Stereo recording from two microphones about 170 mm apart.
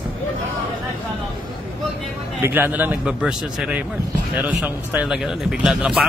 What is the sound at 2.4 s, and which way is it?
Speech, 10° right (ahead or behind).